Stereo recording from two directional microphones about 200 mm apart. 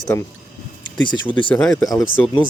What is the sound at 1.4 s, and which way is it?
Speech, 5° left (ahead or behind).